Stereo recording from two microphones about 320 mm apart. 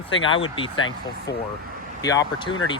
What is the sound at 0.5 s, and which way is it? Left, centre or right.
Speech, centre.